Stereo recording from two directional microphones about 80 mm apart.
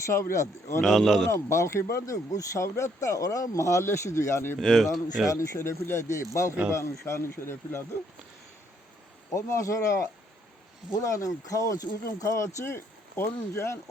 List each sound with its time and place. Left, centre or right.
0.0 s speech: left
0.8 s speech: centre
1.3 s speech: left
4.5 s speech: centre
5.3 s speech: left
9.3 s speech: left